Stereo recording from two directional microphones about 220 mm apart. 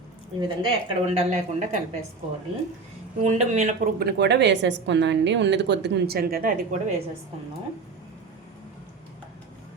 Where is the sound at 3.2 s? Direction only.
30° right (ahead or behind).